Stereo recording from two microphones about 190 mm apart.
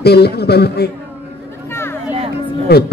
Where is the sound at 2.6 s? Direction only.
55° left (ahead or behind).